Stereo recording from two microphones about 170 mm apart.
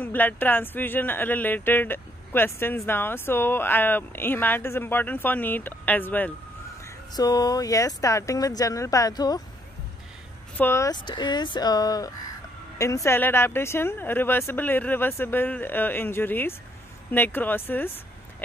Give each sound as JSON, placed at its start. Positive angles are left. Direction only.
{"t": 0.0, "sound": "speech", "side_deg": 10}
{"t": 6.8, "sound": "speech", "side_deg": 20}
{"t": 10.6, "sound": "speech", "side_deg": 15}